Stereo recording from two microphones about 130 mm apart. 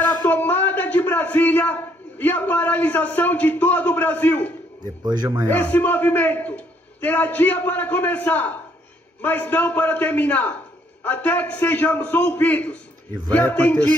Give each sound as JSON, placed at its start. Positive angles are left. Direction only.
{"t": 0.2, "sound": "a man's voice", "side_deg": 15}
{"t": 5.0, "sound": "a man's voice", "side_deg": -35}
{"t": 5.5, "sound": "a man's voice", "side_deg": 15}